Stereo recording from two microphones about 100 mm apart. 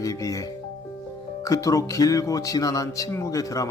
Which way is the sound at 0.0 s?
35° left (ahead or behind).